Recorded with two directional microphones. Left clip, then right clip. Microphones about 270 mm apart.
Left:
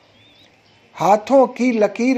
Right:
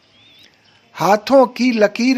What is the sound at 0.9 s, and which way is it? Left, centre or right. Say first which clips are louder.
A man's voice: right 1 dB; right.